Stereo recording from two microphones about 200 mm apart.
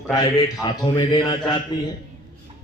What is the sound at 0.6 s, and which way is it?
A man's voice, 25° left (ahead or behind).